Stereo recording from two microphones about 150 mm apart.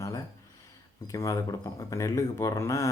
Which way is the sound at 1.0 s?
20° left (ahead or behind).